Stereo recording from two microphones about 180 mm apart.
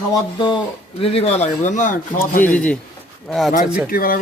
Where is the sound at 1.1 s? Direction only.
40° left (ahead or behind).